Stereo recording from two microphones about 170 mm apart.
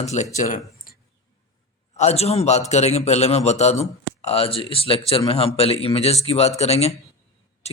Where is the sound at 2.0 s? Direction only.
40° left (ahead or behind).